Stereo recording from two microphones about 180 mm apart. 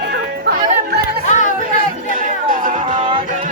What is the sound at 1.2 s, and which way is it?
Chatter, 45° left (ahead or behind).